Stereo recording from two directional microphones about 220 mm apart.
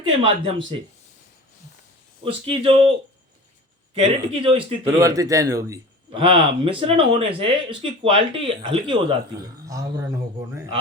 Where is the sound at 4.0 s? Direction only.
25° right (ahead or behind).